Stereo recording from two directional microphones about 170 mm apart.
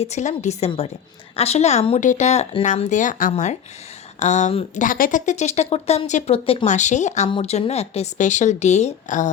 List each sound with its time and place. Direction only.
0.0 s a woman's voice: 40° left (ahead or behind)
7.3 s a woman's voice: 35° left (ahead or behind)